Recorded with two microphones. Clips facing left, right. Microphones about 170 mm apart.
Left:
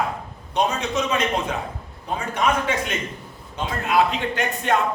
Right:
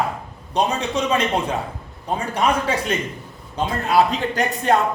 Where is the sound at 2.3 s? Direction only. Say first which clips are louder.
Right 1 dB; 35° right (ahead or behind).